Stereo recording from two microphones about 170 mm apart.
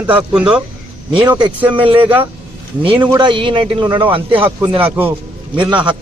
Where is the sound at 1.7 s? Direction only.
30° right (ahead or behind).